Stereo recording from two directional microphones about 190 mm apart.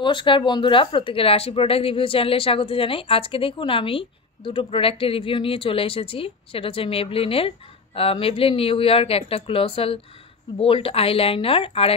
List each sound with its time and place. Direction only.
0.0 s speech: 25° left (ahead or behind)